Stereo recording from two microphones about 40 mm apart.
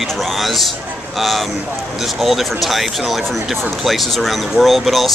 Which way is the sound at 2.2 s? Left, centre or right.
Centre.